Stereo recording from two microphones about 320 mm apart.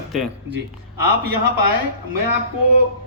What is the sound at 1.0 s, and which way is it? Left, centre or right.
Speech, right.